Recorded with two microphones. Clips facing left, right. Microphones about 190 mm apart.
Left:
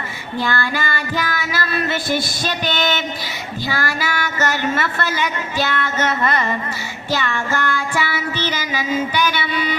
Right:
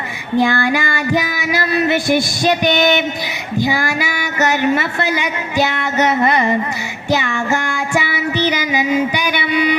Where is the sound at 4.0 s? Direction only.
15° right (ahead or behind).